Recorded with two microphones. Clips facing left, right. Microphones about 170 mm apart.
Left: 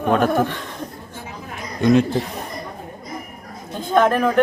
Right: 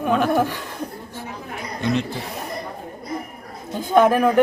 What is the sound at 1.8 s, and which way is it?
Speech, 50° left (ahead or behind).